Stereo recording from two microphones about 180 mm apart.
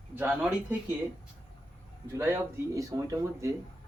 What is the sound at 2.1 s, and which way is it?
Speech, 15° right (ahead or behind).